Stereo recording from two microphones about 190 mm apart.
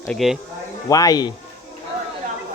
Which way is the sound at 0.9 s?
20° left (ahead or behind).